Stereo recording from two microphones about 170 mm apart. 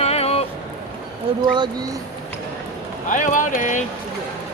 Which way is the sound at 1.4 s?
25° right (ahead or behind).